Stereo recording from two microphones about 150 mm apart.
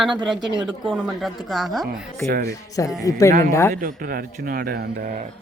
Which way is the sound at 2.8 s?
20° left (ahead or behind).